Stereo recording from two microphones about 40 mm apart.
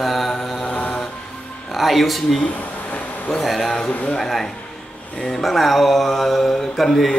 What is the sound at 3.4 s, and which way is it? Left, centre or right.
Mantra, centre.